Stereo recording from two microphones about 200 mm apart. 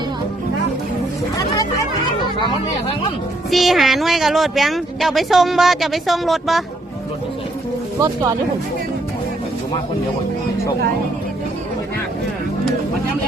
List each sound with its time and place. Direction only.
3.5 s speech: centre (ahead or behind)
7.9 s speech: 20° right (ahead or behind)